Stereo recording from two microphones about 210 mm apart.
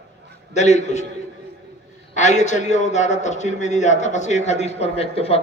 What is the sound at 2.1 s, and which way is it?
Speech, 35° left (ahead or behind).